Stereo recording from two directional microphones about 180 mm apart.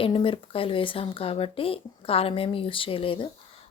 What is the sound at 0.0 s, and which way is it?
A woman's voice, 30° left (ahead or behind).